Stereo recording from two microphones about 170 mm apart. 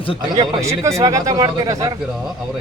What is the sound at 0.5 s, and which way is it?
Speech, 20° right (ahead or behind).